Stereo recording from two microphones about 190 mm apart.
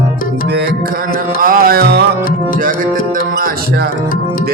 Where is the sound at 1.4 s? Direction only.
50° right (ahead or behind).